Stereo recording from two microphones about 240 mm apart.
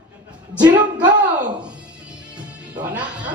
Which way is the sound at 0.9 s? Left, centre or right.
Centre.